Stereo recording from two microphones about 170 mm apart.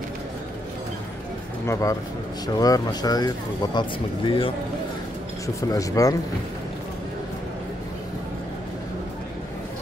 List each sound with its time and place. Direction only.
1.7 s speech: 20° left (ahead or behind)
5.6 s speech: 20° left (ahead or behind)